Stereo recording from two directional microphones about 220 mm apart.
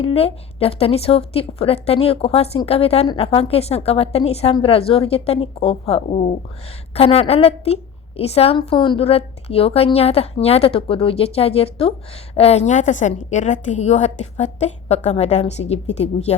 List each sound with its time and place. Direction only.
0.0 s a woman's voice: 25° left (ahead or behind)